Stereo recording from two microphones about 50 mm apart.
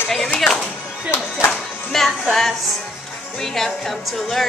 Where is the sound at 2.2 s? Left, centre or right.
Centre.